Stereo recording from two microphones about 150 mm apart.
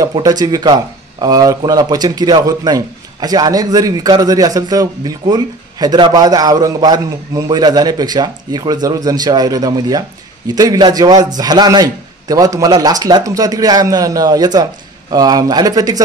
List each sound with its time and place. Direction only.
0.0 s a man's voice: 25° right (ahead or behind)